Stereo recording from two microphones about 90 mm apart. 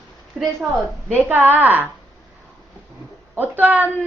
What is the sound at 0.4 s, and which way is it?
Speech, 5° right (ahead or behind).